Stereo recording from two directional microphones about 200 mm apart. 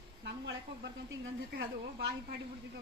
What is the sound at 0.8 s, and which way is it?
Speech, 60° right (ahead or behind).